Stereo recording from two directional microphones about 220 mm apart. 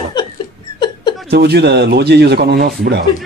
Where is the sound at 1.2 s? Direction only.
45° right (ahead or behind).